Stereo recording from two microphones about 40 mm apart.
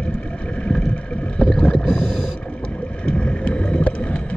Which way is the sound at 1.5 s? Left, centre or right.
Centre.